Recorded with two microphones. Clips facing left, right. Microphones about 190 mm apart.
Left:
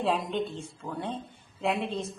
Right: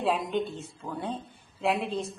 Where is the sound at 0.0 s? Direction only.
Centre (ahead or behind).